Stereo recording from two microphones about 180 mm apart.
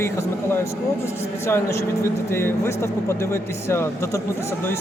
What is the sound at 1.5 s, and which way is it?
Speech, 15° left (ahead or behind).